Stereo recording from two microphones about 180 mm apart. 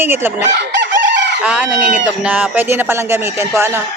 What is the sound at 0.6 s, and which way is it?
Chicken, 70° right (ahead or behind).